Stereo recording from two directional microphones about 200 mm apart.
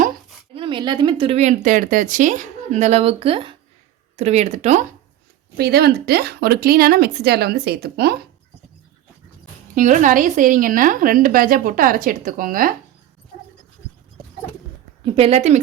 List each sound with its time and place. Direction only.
0.5 s speech: 25° right (ahead or behind)
5.5 s a woman's voice: 50° right (ahead or behind)
9.7 s a woman's voice: 40° right (ahead or behind)
15.0 s speech: 30° right (ahead or behind)